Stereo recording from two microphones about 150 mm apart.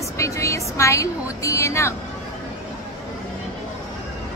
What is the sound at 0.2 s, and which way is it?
A woman's voice, 20° left (ahead or behind).